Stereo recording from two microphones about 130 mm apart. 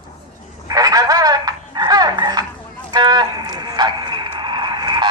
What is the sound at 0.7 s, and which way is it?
Telephone, 30° right (ahead or behind).